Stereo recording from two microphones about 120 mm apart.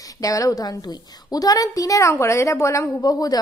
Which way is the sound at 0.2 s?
30° left (ahead or behind).